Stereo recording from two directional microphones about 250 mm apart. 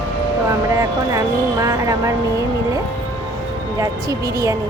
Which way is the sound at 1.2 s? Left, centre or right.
Centre.